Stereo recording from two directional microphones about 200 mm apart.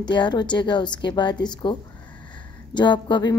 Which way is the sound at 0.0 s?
20° left (ahead or behind).